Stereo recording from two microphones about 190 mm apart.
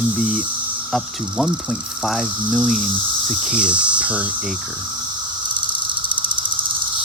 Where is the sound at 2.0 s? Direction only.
Centre (ahead or behind).